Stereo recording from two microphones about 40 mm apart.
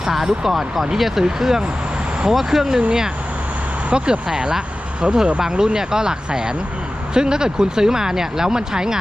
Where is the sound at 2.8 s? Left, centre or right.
Right.